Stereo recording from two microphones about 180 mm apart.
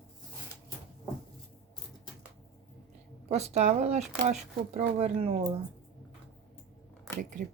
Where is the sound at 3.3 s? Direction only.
35° right (ahead or behind).